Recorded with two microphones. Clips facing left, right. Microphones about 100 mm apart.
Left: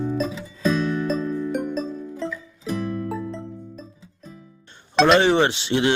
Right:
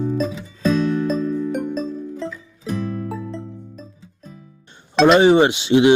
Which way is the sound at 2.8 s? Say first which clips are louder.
Even; 20° right (ahead or behind).